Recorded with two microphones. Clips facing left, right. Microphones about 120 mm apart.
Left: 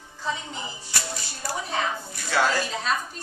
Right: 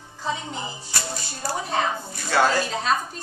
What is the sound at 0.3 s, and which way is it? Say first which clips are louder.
A woman's voice: right 2 dB; 30° right (ahead or behind).